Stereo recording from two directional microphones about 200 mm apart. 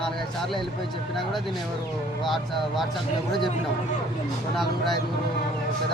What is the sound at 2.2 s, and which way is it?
Speech, centre (ahead or behind).